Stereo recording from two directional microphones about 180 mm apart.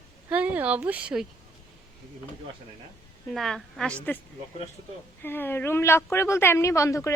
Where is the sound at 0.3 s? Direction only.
10° right (ahead or behind).